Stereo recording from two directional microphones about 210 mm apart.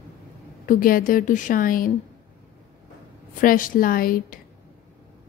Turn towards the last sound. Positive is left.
turn(degrees=45)  # may be behind; listen again after turning